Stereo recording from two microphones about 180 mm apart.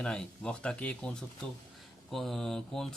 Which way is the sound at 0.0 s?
5° left (ahead or behind).